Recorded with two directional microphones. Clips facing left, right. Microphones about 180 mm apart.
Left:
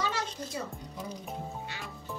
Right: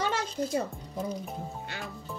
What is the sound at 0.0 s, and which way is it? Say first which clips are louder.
Music: right 4 dB; 55° right (ahead or behind).